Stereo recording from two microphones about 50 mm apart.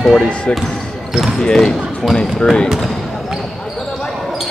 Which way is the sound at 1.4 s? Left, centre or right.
Centre.